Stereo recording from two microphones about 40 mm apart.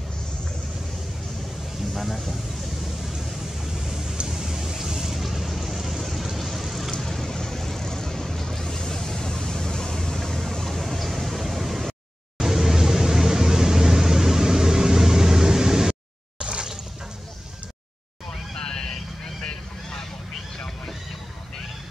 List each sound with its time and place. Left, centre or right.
2.0 s speech: centre
2.8 s vehicle: centre
12.4 s a sound: centre
18.6 s vehicle: centre